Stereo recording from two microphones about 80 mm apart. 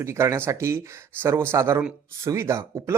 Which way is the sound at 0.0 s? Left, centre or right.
Right.